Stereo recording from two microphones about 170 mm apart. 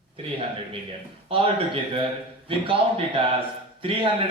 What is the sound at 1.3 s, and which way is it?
Speech, 30° right (ahead or behind).